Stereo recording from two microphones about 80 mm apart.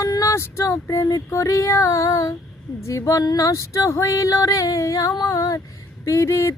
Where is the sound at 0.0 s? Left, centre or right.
Left.